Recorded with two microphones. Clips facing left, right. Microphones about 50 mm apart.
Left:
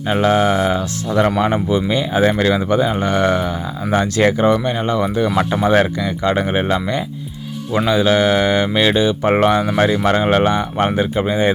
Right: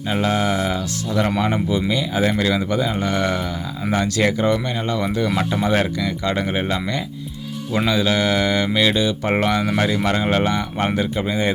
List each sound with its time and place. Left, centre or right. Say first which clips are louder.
0.1 s speech: left 5 dB; left